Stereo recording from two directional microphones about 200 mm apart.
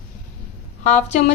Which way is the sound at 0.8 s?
35° left (ahead or behind).